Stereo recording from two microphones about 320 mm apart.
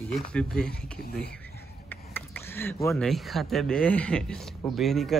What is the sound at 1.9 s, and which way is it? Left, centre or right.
Speech, centre.